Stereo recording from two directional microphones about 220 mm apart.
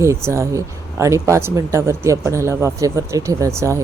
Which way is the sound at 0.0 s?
10° right (ahead or behind).